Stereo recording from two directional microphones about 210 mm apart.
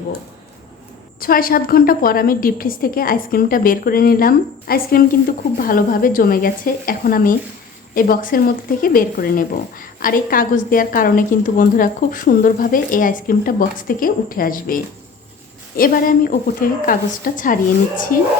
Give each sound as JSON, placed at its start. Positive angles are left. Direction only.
{"t": 1.2, "sound": "a woman's voice", "side_deg": 45}